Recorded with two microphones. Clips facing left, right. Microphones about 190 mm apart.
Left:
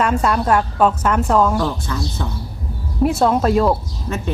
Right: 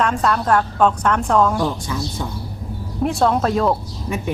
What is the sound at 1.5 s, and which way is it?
Speech, 10° right (ahead or behind).